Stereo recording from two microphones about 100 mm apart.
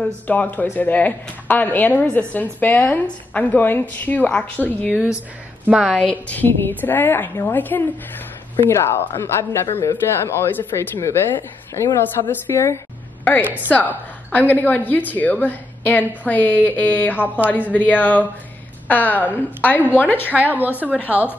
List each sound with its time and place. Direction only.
0.0 s speech: 15° left (ahead or behind)
5.7 s a woman's voice: 5° right (ahead or behind)
5.9 s speech: 15° left (ahead or behind)
14.3 s speech: 15° left (ahead or behind)
20.2 s a woman's voice: 15° right (ahead or behind)